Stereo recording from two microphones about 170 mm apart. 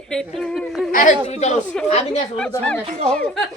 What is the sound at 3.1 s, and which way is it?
Speech, 5° left (ahead or behind).